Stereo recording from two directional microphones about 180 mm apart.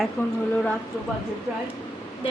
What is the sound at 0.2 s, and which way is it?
Speech, 10° left (ahead or behind).